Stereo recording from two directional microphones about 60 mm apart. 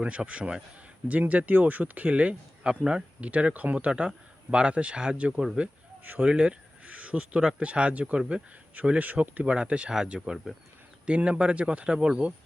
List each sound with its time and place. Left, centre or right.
0.0 s speech: centre
11.0 s speech: centre